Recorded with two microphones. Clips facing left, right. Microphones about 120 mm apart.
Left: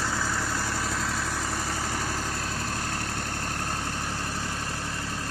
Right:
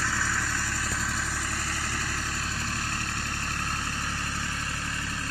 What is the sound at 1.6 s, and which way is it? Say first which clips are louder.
Vehicle: left 3 dB; 40° left (ahead or behind).